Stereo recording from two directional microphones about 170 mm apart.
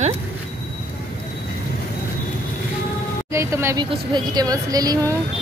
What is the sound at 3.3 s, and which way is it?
A woman's voice, 15° right (ahead or behind).